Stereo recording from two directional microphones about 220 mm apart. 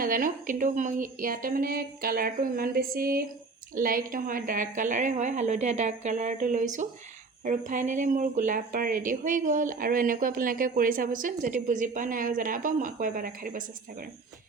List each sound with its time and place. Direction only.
0.0 s speech: 40° right (ahead or behind)